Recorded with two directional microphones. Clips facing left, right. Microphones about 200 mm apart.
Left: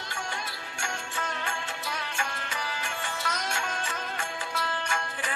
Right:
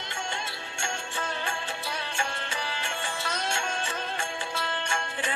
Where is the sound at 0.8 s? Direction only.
30° right (ahead or behind).